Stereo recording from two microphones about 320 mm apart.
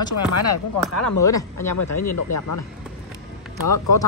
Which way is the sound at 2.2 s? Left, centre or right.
Left.